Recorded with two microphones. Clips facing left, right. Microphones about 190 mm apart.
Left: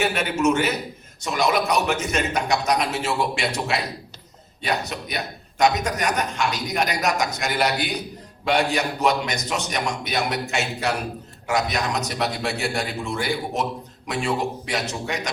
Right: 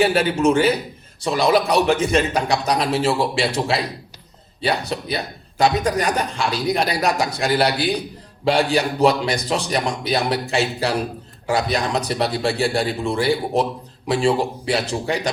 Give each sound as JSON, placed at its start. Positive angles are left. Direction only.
{"t": 0.0, "sound": "a man's voice", "side_deg": -30}